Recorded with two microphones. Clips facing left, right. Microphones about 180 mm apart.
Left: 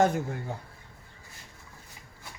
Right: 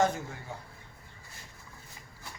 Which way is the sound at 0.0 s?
55° left (ahead or behind).